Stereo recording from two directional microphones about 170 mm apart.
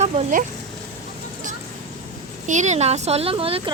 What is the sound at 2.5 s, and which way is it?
Speech, 45° right (ahead or behind).